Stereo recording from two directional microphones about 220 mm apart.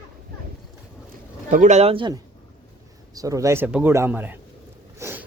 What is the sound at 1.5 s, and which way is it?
Speech, 35° right (ahead or behind).